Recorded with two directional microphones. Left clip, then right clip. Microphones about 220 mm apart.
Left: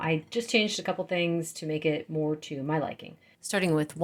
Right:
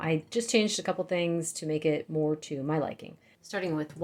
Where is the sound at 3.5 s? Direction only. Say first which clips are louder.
Left 5 dB; 55° left (ahead or behind).